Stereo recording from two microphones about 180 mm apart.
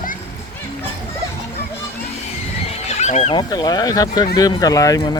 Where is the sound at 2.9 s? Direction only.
40° left (ahead or behind).